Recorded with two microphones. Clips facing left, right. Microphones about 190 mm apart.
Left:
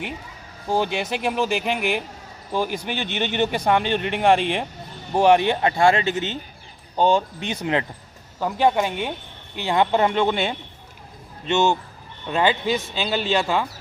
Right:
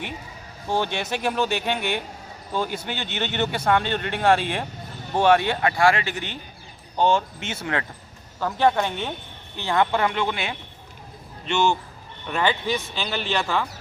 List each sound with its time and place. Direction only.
0.7 s speech: 5° left (ahead or behind)